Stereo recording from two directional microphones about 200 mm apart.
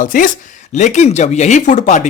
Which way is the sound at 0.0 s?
40° left (ahead or behind).